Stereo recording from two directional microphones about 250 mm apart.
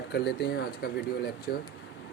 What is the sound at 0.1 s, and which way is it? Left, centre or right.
Speech, left.